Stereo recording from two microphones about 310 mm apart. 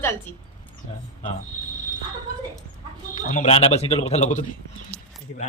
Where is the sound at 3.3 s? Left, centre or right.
Left.